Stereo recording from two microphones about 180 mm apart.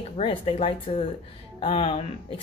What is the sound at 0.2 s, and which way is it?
Speech, 30° left (ahead or behind).